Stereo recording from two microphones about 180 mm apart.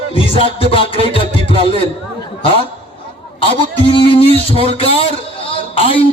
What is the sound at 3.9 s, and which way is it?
A man's voice, 30° left (ahead or behind).